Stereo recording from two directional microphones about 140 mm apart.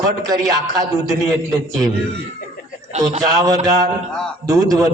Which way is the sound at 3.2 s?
25° right (ahead or behind).